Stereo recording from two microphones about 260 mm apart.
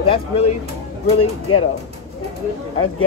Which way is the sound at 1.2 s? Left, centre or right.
Left.